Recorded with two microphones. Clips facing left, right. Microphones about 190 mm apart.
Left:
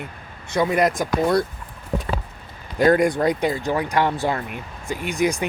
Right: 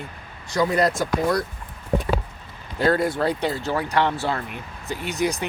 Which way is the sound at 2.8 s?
15° left (ahead or behind).